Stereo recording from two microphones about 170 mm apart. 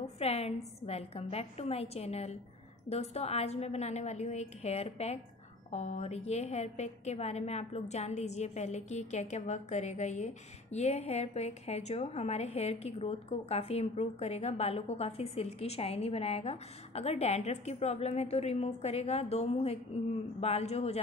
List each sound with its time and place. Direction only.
0.0 s a woman's voice: 35° left (ahead or behind)